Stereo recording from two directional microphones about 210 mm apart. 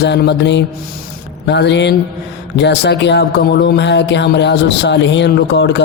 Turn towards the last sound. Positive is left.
turn(degrees=55)  # may be behind; listen again after turning